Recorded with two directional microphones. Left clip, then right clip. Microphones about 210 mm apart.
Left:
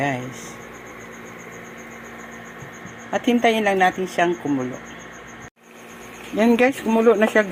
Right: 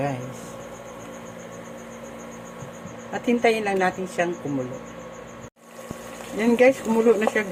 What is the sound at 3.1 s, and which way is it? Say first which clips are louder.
A woman's voice: left 3 dB; 20° left (ahead or behind).